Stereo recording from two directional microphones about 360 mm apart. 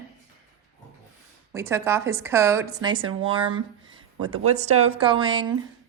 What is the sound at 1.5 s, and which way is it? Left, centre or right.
A woman's voice, centre.